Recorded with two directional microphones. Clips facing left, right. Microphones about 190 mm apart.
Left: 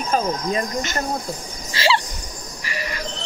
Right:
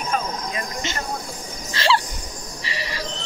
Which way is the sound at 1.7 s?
5° left (ahead or behind).